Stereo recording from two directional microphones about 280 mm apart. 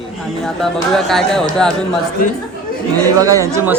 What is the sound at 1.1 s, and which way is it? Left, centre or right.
Speech, centre.